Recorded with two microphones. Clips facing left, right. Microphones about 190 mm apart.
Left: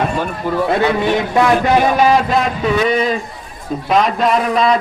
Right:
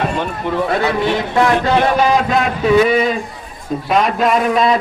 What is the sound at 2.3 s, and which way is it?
A man's voice, centre (ahead or behind).